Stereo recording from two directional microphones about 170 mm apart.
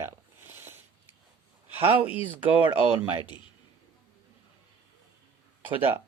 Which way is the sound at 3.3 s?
30° left (ahead or behind).